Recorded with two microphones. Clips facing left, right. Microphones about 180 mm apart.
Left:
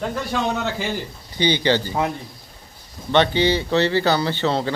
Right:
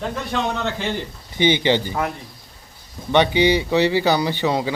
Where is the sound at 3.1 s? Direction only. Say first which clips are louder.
Right 1 dB; 15° right (ahead or behind).